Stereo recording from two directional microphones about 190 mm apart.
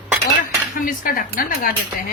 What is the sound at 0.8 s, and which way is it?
Speech, 45° left (ahead or behind).